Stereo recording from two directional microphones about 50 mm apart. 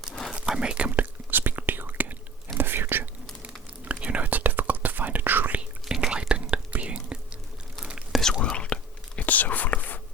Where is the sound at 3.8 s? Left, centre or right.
Right.